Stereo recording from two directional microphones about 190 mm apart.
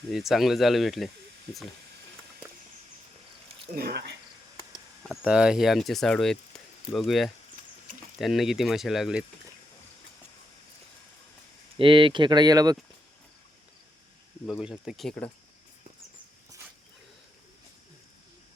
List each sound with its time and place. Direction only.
0.1 s speech: centre (ahead or behind)
3.8 s speech: 55° right (ahead or behind)
5.0 s speech: 5° right (ahead or behind)
11.8 s speech: 25° right (ahead or behind)
14.4 s speech: centre (ahead or behind)